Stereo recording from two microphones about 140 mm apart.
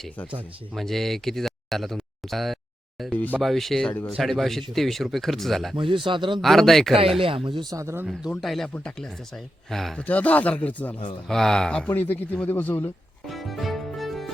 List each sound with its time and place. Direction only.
0.7 s speech: centre (ahead or behind)
3.1 s speech: 10° left (ahead or behind)
3.3 s speech: centre (ahead or behind)
5.7 s speech: 35° right (ahead or behind)
6.4 s speech: centre (ahead or behind)
7.2 s speech: 40° right (ahead or behind)
7.7 s speech: 20° right (ahead or behind)
8.0 s speech: centre (ahead or behind)
13.2 s music: centre (ahead or behind)